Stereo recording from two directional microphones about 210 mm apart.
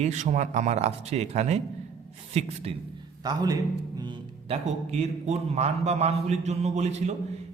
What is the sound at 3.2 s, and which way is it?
Music, 20° right (ahead or behind).